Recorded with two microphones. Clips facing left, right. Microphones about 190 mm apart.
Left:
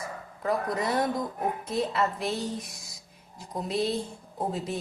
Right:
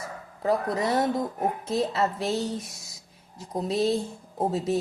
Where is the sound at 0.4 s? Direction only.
25° right (ahead or behind).